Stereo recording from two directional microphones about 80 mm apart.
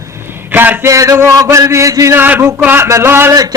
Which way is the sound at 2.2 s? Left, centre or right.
Right.